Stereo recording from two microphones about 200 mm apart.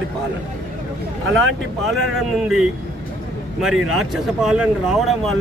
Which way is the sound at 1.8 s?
Centre (ahead or behind).